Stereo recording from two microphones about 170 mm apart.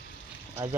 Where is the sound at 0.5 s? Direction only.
15° right (ahead or behind).